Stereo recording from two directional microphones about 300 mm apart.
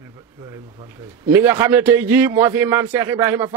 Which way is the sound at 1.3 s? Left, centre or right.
Centre.